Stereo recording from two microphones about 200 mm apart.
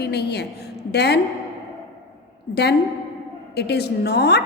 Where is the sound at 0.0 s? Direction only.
55° left (ahead or behind).